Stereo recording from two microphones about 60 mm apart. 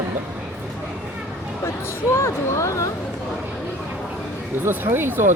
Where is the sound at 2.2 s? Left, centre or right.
Left.